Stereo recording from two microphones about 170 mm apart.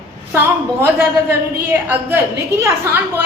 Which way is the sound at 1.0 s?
10° right (ahead or behind).